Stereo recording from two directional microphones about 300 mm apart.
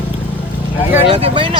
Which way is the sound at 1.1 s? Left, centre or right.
Centre.